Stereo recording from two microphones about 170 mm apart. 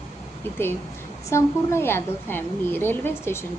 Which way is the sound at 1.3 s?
15° left (ahead or behind).